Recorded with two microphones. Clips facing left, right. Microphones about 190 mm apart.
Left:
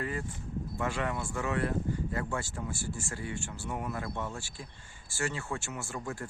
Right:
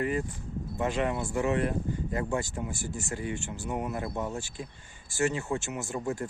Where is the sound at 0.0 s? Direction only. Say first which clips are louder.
Right 6 dB; 20° right (ahead or behind).